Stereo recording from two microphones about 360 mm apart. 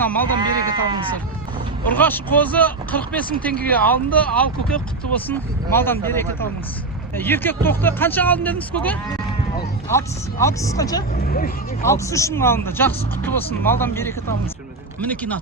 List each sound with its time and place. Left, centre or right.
0.0 s speech: centre
0.3 s sheep: centre
2.0 s speech: centre
11.2 s vehicle: left
11.9 s speech: centre